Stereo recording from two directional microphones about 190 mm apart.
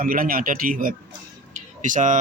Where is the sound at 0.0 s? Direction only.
50° right (ahead or behind).